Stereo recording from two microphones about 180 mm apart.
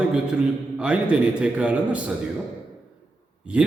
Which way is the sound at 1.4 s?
5° right (ahead or behind).